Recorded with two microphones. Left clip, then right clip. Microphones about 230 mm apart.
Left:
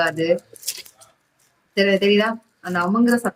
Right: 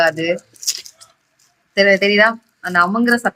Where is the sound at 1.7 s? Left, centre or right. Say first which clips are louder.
Right 4 dB; centre.